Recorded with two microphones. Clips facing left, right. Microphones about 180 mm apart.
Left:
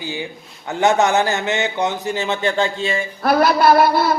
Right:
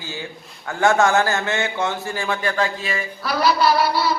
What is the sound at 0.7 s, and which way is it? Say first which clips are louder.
Speech: left 1 dB; 20° left (ahead or behind).